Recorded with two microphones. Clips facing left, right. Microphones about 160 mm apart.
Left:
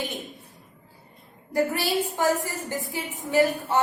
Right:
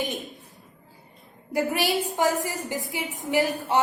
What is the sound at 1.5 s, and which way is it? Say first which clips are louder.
A woman's voice: even; 15° right (ahead or behind).